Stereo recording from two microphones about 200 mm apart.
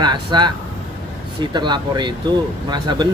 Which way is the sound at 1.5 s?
20° right (ahead or behind).